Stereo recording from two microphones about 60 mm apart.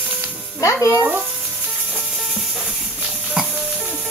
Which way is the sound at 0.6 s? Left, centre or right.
Left.